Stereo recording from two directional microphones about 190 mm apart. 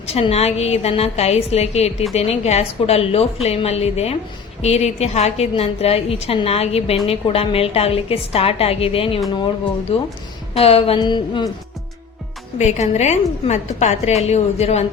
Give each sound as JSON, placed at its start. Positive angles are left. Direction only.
{"t": 0.1, "sound": "a woman's voice", "side_deg": 30}
{"t": 12.5, "sound": "a woman's voice", "side_deg": 35}